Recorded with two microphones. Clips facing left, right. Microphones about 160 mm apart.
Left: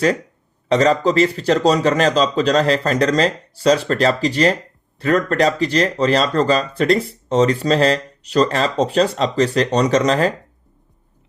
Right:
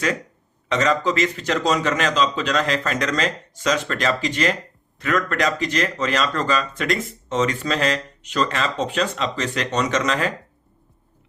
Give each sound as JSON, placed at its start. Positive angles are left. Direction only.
{"t": 0.7, "sound": "speech", "side_deg": 35}